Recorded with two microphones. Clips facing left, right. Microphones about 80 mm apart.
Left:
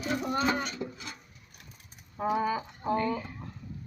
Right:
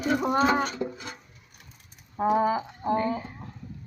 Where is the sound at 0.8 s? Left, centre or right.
Right.